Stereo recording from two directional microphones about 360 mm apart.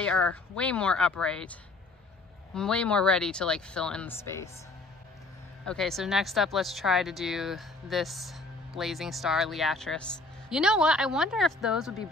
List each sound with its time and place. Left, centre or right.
0.0 s speech: centre
5.7 s speech: centre